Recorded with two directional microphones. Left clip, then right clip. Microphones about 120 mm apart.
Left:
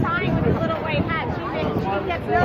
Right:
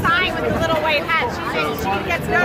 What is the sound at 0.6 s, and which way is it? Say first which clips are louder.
A man's voice: right 6 dB; 20° left (ahead or behind).